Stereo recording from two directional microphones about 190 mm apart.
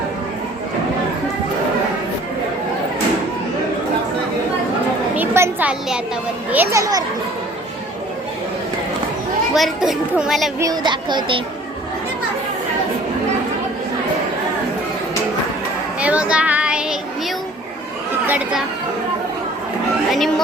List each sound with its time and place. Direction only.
5.1 s a sound: 10° right (ahead or behind)
6.5 s a child's voice: 15° right (ahead or behind)
9.6 s a child's voice: centre (ahead or behind)
10.6 s speech: 20° right (ahead or behind)
16.0 s child singing: 5° right (ahead or behind)
18.3 s speech: 5° right (ahead or behind)